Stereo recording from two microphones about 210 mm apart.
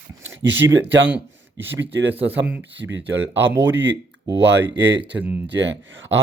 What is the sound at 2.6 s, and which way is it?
Speech, 60° right (ahead or behind).